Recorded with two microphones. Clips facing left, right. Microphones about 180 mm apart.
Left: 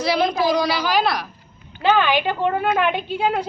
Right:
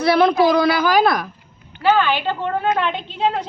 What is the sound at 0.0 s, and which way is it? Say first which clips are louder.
A child's voice: right 5 dB; 60° right (ahead or behind).